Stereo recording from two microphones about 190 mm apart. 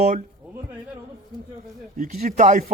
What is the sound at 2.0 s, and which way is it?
Speech, 40° right (ahead or behind).